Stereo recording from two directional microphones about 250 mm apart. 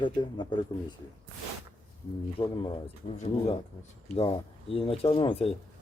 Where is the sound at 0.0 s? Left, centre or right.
Centre.